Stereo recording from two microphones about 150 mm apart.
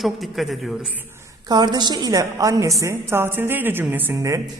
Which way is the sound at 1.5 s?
30° right (ahead or behind).